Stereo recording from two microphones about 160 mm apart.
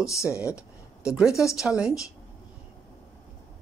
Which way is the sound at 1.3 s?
20° left (ahead or behind).